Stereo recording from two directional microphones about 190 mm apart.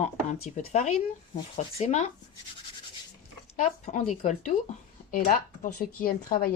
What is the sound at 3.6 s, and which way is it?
Speech, 40° left (ahead or behind).